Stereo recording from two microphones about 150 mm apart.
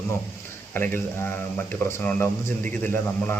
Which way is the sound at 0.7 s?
15° left (ahead or behind).